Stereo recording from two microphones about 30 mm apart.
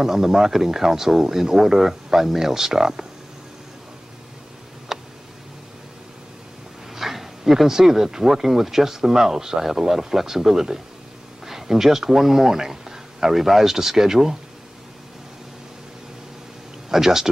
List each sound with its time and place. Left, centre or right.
0.0 s speech: centre
4.9 s tick: centre
7.0 s speech: centre
16.9 s speech: centre